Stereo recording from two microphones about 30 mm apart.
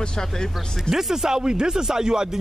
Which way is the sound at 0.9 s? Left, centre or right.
Centre.